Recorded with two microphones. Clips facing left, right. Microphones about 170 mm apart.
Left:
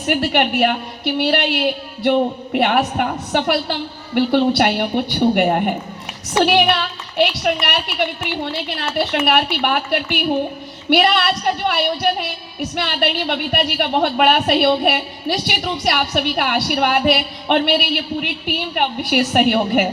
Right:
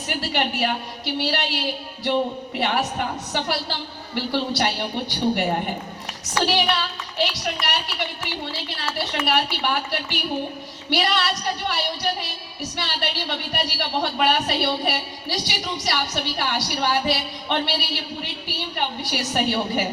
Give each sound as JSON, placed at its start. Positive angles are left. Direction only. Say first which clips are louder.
{"t": 0.0, "sound": "a woman's voice", "louder": "left 7 dB", "side_deg": 60}